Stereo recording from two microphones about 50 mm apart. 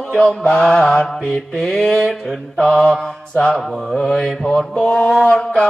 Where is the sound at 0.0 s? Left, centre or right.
Left.